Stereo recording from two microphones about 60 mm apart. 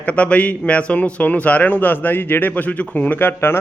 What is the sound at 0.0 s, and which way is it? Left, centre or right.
A man's voice, left.